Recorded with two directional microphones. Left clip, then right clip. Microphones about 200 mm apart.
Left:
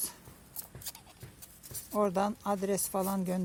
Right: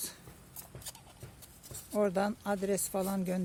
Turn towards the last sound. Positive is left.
turn(degrees=5)  # may be behind; listen again after turning